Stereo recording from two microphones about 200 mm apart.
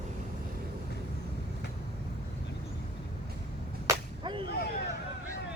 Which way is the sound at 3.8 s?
20° right (ahead or behind).